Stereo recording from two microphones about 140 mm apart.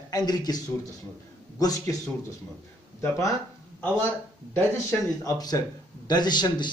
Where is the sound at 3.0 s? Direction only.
20° left (ahead or behind).